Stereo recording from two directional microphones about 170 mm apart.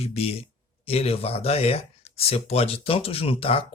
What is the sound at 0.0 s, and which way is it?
Speech, 35° left (ahead or behind).